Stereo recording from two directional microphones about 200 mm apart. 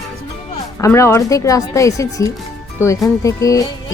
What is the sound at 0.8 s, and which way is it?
Speech, 15° left (ahead or behind).